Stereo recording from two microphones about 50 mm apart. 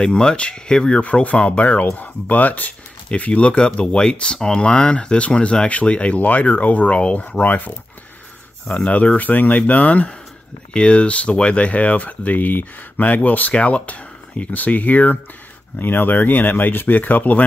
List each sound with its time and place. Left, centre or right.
0.0 s speech: centre
1.2 s speech: left
8.7 s speech: left